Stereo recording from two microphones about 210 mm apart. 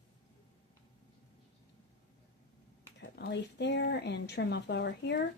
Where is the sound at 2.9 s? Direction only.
50° left (ahead or behind).